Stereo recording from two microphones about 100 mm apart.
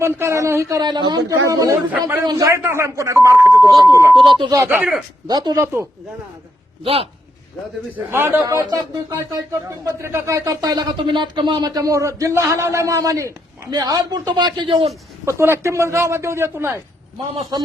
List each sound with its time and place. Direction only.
0.0 s a man's voice: 25° right (ahead or behind)
0.8 s a man's voice: 50° right (ahead or behind)
1.3 s a man's voice: 35° right (ahead or behind)
4.3 s speech: 55° right (ahead or behind)
4.5 s a man's voice: 25° right (ahead or behind)
5.3 s a man's voice: 40° right (ahead or behind)
5.5 s a man's voice: 25° right (ahead or behind)
6.8 s a man's voice: 75° right (ahead or behind)
7.9 s a man's voice: 20° right (ahead or behind); by 14.9 s 65° right (ahead or behind)
15.2 s a man's voice: 25° right (ahead or behind)
17.5 s speech: 40° right (ahead or behind)